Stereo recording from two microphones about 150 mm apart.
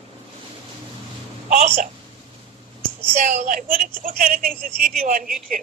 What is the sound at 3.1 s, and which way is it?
A woman's voice, 50° right (ahead or behind).